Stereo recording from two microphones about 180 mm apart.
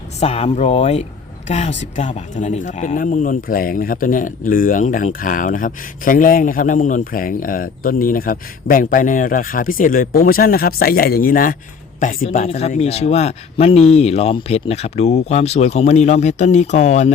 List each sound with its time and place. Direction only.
0.2 s speech: 35° left (ahead or behind)
12.5 s speech: 35° left (ahead or behind)